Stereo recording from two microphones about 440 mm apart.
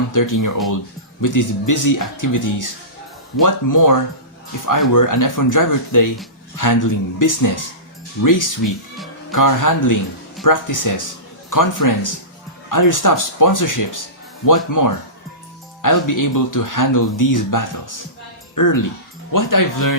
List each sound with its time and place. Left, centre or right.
0.1 s speech: left